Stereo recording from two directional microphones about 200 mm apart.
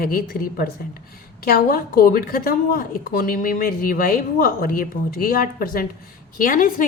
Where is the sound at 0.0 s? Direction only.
45° left (ahead or behind).